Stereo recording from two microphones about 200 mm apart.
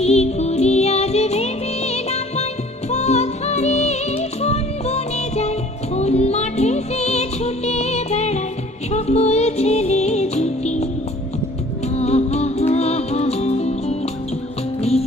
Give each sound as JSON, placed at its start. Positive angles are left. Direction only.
{"t": 0.0, "sound": "music", "side_deg": 30}
{"t": 11.9, "sound": "music", "side_deg": 30}